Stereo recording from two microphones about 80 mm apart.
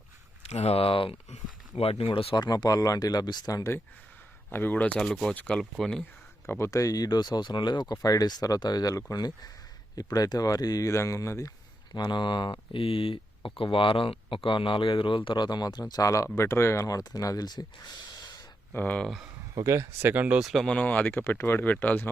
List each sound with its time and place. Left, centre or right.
1.7 s speech: left
4.5 s speech: left
4.9 s speech: centre
6.4 s speech: left
8.0 s speech: left
11.9 s speech: left
15.9 s speech: left
16.8 s speech: left
18.7 s speech: left
19.6 s speech: right
20.4 s speech: centre
20.7 s speech: centre